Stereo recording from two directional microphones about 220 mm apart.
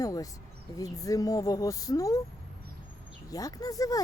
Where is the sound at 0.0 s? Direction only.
15° left (ahead or behind).